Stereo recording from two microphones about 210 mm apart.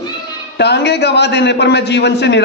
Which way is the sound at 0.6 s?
55° left (ahead or behind).